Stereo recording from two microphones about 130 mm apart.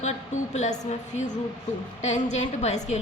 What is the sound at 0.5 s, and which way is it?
A woman's voice, 65° left (ahead or behind).